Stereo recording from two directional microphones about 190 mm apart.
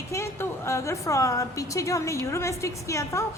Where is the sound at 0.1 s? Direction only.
15° left (ahead or behind).